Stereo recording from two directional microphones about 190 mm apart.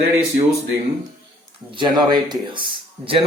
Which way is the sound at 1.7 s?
25° right (ahead or behind).